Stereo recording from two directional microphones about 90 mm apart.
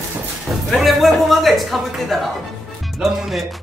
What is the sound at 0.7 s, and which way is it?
Speech, centre (ahead or behind).